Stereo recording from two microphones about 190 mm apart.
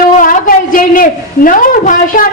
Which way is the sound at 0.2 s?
45° left (ahead or behind).